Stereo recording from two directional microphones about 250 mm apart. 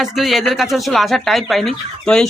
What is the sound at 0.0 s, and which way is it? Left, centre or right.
Speech, centre.